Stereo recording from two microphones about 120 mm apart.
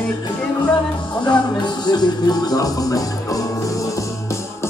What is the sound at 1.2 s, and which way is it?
Speech, 35° left (ahead or behind).